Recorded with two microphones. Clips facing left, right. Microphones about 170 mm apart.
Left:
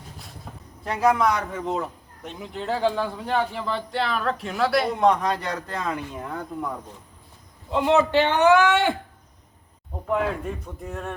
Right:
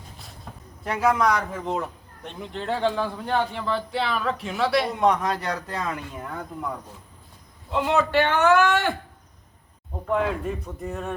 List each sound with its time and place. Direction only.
0.5 s a sound: 5° left (ahead or behind)
0.9 s a man's voice: centre (ahead or behind)
7.7 s a man's voice: 15° left (ahead or behind)
10.1 s a man's voice: centre (ahead or behind)